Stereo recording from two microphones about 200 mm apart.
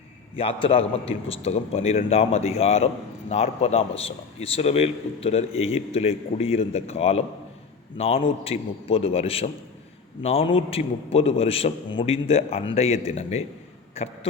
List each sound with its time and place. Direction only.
0.3 s a man's voice: 25° left (ahead or behind)